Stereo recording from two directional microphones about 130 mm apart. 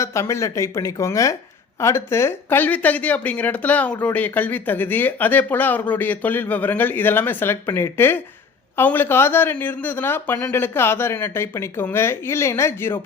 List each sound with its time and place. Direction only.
0.0 s a woman's voice: 20° left (ahead or behind)